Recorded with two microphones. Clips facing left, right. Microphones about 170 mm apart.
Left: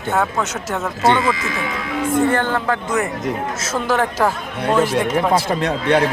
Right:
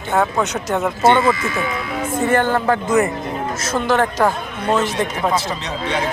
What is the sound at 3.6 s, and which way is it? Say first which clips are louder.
Speech: right 3 dB; 5° left (ahead or behind).